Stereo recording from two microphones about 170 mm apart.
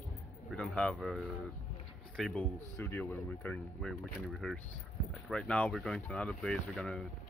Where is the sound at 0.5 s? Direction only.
5° left (ahead or behind).